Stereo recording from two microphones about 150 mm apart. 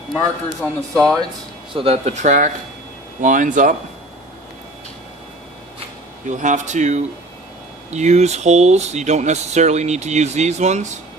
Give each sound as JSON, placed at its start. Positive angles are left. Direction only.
{"t": 0.6, "sound": "speech", "side_deg": 5}
{"t": 1.7, "sound": "speech", "side_deg": -40}
{"t": 6.2, "sound": "speech", "side_deg": -55}